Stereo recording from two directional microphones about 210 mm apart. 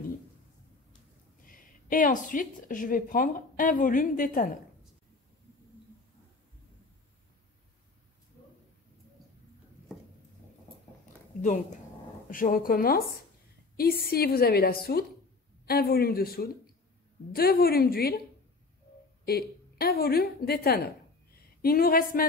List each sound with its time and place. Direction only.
1.4 s a woman's voice: 40° left (ahead or behind)
12.3 s speech: 40° left (ahead or behind)
14.0 s a woman's voice: 45° left (ahead or behind)
19.2 s a woman's voice: 45° left (ahead or behind)